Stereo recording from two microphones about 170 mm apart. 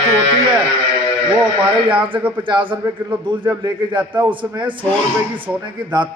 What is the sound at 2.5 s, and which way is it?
Speech, 30° right (ahead or behind).